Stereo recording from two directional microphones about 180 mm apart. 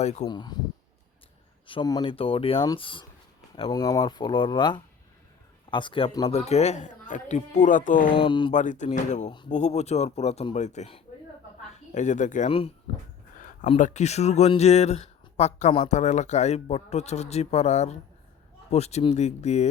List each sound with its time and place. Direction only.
0.0 s speech: 40° left (ahead or behind)
0.3 s speech: 25° left (ahead or behind)
1.6 s speech: 25° left (ahead or behind); by 8.1 s 45° left (ahead or behind)
8.1 s speech: 25° left (ahead or behind)
8.5 s speech: 45° left (ahead or behind)
13.7 s speech: 40° left (ahead or behind)